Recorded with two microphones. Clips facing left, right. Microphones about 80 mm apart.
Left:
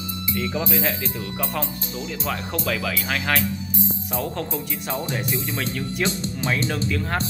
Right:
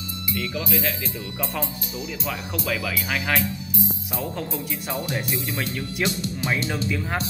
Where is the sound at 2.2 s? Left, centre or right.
Centre.